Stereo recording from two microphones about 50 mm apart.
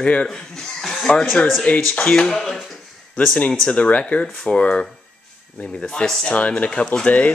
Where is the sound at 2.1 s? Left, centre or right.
Centre.